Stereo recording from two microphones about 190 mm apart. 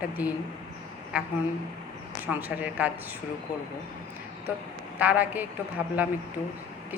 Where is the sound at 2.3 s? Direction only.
10° right (ahead or behind).